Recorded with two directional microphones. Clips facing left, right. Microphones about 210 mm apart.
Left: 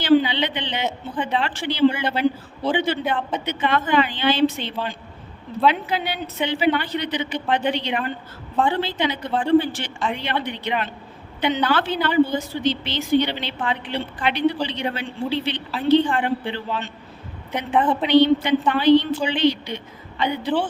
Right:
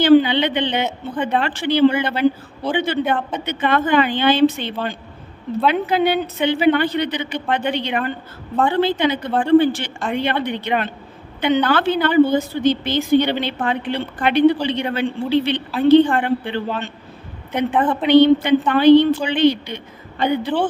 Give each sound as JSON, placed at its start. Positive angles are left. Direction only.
{"t": 0.0, "sound": "a woman's voice", "side_deg": -55}
{"t": 18.1, "sound": "a woman's voice", "side_deg": -55}